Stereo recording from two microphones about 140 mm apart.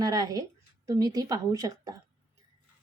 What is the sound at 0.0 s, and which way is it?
A woman's voice, 25° right (ahead or behind).